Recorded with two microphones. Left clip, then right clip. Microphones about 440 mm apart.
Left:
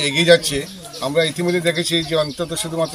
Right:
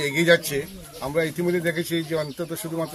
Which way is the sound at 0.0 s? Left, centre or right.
Right.